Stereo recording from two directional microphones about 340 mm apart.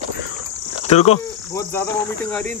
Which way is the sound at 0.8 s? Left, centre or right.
Centre.